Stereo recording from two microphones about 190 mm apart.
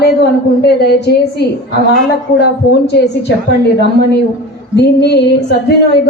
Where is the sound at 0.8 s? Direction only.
60° left (ahead or behind).